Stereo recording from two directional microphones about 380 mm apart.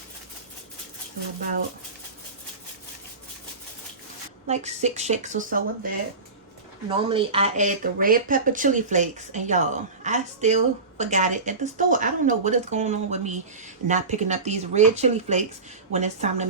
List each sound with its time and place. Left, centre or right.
4.4 s speech: centre
7.1 s speech: centre